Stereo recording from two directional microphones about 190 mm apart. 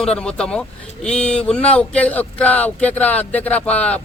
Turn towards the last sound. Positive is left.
turn(degrees=5)  # may be behind; listen again after turning